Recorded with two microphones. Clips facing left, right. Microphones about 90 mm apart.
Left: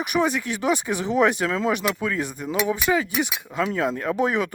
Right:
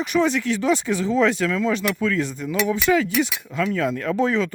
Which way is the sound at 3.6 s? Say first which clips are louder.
Right 1 dB; 25° left (ahead or behind).